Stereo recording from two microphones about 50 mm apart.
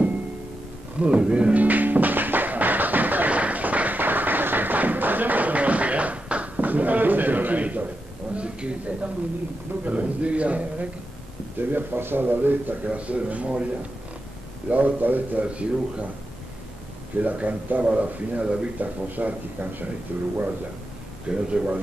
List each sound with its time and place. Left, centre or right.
0.9 s music: right
8.4 s speech: right
11.5 s a man's voice: right
12.9 s speech: right
14.7 s a man's voice: right
15.4 s speech: right
17.2 s speech: right
18.8 s a man's voice: right
21.3 s speech: right